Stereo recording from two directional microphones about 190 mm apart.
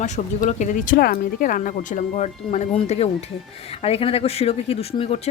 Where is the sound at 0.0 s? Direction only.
40° left (ahead or behind).